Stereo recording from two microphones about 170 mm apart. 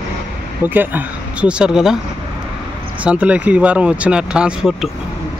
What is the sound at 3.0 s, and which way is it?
Speech, 5° right (ahead or behind).